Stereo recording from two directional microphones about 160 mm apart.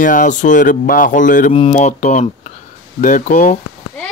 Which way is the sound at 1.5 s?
40° left (ahead or behind).